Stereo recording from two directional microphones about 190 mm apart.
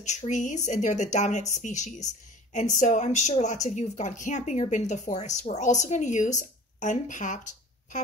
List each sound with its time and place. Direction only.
0.0 s speech: 40° left (ahead or behind)